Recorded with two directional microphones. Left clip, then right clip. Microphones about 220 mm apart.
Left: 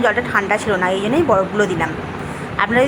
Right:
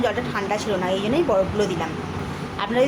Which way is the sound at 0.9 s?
5° left (ahead or behind).